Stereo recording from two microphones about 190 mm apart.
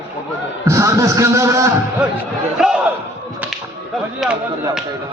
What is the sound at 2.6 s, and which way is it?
Speech, centre (ahead or behind).